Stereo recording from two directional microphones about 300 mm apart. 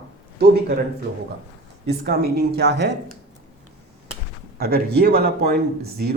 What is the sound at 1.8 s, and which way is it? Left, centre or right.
Speech, right.